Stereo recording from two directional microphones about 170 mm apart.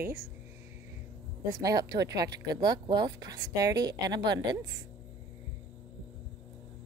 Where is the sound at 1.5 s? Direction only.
20° right (ahead or behind).